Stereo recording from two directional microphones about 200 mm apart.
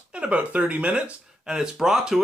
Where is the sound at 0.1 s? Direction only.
5° right (ahead or behind).